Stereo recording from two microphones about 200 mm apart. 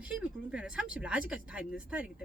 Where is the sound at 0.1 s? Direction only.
5° right (ahead or behind).